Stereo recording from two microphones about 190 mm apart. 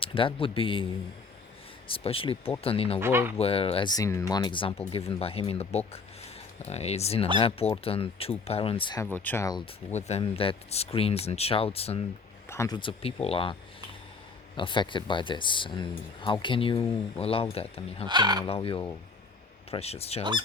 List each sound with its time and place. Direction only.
0.0 s speech: 30° left (ahead or behind)
1.9 s speech: 30° left (ahead or behind)
3.0 s speech: 10° right (ahead or behind)
3.3 s speech: 30° left (ahead or behind)
9.1 s speech: 10° left (ahead or behind)
9.9 s speech: 35° left (ahead or behind)
12.5 s speech: 15° left (ahead or behind)
18.0 s speech: 25° right (ahead or behind)
18.4 s speech: 30° left (ahead or behind)